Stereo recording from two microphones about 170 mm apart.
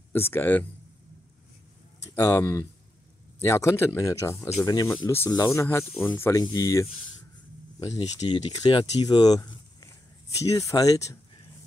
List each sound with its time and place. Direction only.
0.1 s speech: 10° left (ahead or behind)
2.0 s speech: 20° left (ahead or behind)